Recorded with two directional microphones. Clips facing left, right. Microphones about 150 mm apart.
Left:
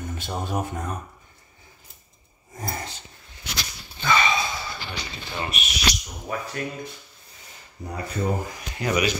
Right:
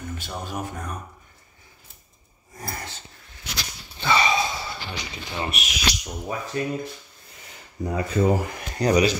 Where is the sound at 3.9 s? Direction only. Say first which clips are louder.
Right 1 dB; 30° right (ahead or behind).